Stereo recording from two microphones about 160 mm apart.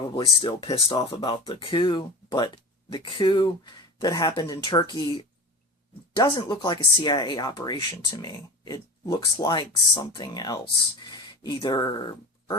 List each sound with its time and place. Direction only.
0.4 s speech: 35° left (ahead or behind)